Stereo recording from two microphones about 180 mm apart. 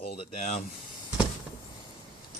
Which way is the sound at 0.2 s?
35° left (ahead or behind).